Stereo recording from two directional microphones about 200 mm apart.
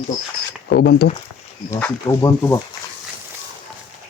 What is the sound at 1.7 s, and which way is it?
Speech, 15° left (ahead or behind).